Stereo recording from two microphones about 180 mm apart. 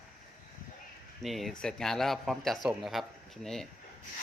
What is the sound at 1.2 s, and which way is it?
A man's voice, centre (ahead or behind).